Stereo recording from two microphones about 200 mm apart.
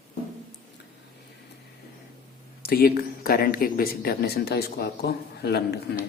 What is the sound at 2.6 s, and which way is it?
Speech, 50° left (ahead or behind).